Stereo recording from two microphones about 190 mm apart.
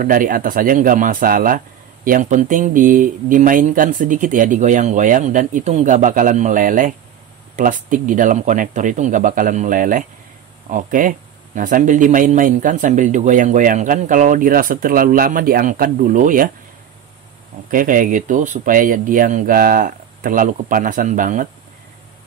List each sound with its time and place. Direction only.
0.0 s a man's voice: 45° right (ahead or behind)
17.6 s a man's voice: 45° right (ahead or behind)